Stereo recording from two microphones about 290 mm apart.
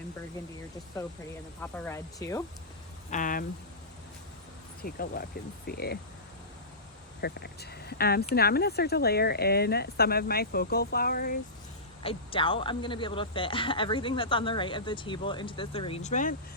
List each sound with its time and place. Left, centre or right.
1.6 s speech: centre
3.1 s speech: left
4.8 s speech: left
7.2 s speech: left
12.0 s speech: centre